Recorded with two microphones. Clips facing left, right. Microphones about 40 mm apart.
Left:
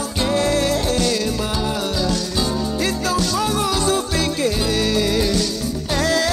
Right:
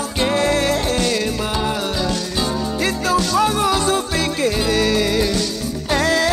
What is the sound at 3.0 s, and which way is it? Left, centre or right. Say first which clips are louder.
Music: right 6 dB; right.